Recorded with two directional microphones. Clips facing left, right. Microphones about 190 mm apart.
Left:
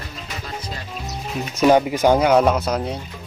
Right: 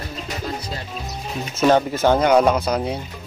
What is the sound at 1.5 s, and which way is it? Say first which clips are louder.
Speech: left 1 dB; 10° left (ahead or behind).